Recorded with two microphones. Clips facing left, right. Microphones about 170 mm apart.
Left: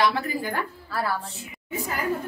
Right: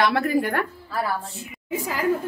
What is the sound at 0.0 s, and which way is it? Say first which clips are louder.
Speech: right 4 dB; 60° right (ahead or behind).